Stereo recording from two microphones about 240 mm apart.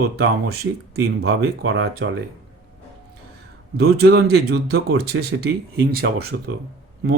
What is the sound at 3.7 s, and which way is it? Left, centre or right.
Speech, right.